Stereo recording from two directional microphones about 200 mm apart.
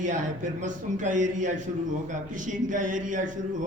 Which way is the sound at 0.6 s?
40° right (ahead or behind).